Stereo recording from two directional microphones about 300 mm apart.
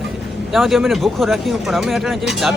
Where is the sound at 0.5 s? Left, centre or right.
Centre.